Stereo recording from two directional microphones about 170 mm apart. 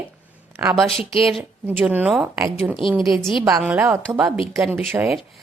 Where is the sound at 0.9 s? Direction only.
35° left (ahead or behind).